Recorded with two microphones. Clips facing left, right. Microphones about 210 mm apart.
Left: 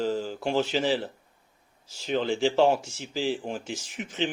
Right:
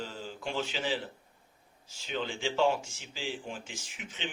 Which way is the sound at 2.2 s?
40° left (ahead or behind).